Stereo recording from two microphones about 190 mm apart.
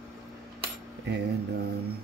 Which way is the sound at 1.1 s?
60° right (ahead or behind).